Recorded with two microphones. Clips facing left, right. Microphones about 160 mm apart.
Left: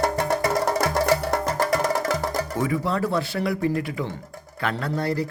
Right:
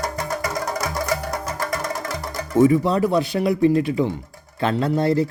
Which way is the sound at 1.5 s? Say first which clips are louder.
Left 5 dB; 35° left (ahead or behind).